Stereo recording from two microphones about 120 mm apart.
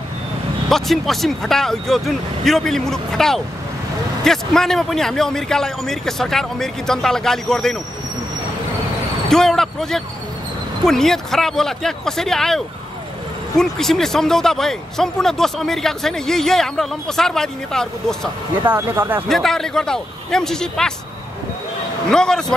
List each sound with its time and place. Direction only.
0.7 s a man's voice: centre (ahead or behind)
9.3 s a man's voice: 5° left (ahead or behind)
18.7 s speech: 20° right (ahead or behind)
19.2 s a man's voice: centre (ahead or behind)
22.1 s a man's voice: 5° left (ahead or behind)